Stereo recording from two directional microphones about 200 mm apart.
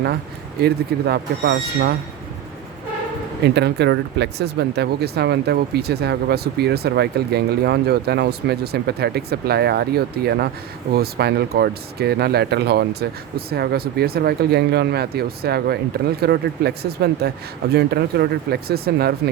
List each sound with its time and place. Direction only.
0.6 s speech: 55° right (ahead or behind)
3.4 s speech: 55° right (ahead or behind)